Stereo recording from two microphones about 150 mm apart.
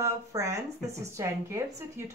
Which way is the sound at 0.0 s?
20° right (ahead or behind).